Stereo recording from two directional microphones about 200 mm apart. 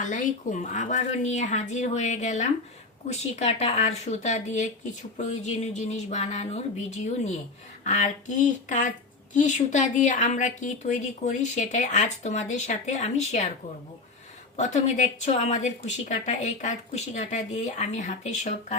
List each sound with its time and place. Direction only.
0.0 s speech: 40° left (ahead or behind)
14.5 s speech: 35° left (ahead or behind)